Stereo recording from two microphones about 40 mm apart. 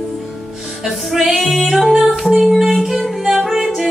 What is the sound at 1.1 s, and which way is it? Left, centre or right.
Music, centre.